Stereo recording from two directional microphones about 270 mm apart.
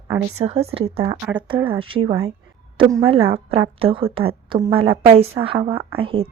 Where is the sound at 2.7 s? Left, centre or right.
Centre.